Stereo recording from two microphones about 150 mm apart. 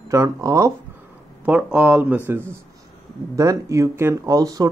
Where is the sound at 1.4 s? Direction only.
10° right (ahead or behind).